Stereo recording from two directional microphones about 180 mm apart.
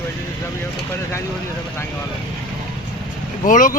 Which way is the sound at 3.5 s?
45° left (ahead or behind).